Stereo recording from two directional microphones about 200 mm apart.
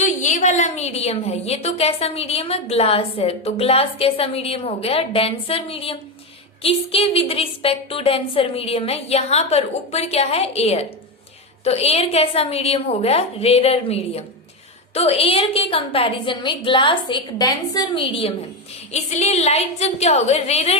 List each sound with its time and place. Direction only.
0.0 s a woman's voice: 35° left (ahead or behind)